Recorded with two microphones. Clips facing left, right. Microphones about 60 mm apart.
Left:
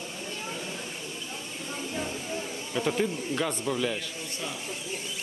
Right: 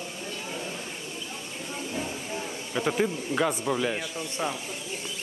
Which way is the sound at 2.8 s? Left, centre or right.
Centre.